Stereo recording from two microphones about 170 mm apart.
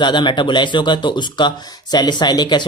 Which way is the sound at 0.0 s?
25° left (ahead or behind).